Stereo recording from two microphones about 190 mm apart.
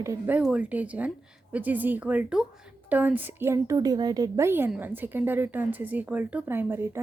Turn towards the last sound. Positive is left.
turn(degrees=-10)  # may be behind; listen again after turning